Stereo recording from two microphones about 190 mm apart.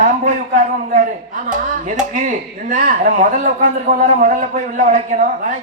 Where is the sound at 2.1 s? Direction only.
45° right (ahead or behind).